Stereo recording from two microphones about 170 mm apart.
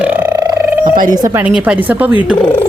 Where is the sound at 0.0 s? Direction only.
10° right (ahead or behind).